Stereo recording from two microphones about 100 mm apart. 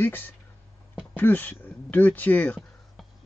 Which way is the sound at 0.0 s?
20° left (ahead or behind).